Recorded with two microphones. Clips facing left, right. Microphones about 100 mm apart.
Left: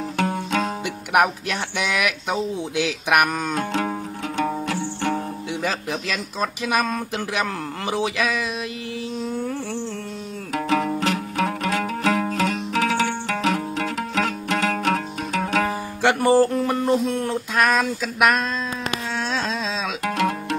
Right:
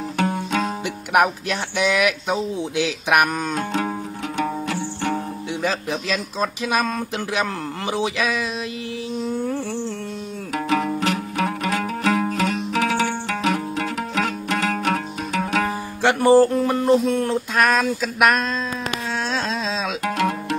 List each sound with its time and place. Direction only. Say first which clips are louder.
0.2 s music: right 1 dB; 15° right (ahead or behind)
1.1 s speech: right 1 dB; 20° right (ahead or behind)
4.4 s music: even; 10° right (ahead or behind)
6.0 s speech: right 3 dB; 20° right (ahead or behind)
10.5 s music: even; 10° right (ahead or behind)
16.3 s speech: right 4 dB; 20° right (ahead or behind)
16.9 s speech: right 3 dB; 5° left (ahead or behind)
20.1 s music: even; 15° right (ahead or behind)